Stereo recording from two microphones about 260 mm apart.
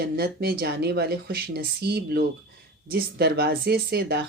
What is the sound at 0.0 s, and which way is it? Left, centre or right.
Speech, right.